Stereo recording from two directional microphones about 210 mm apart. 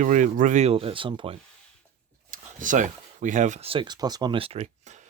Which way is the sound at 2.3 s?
40° right (ahead or behind).